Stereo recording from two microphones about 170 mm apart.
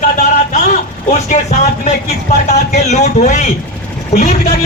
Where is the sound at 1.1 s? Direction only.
45° left (ahead or behind).